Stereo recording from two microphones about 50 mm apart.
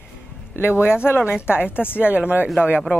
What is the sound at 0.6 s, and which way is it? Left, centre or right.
Speech, left.